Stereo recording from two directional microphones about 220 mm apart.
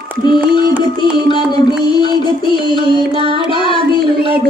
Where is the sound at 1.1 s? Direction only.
20° left (ahead or behind).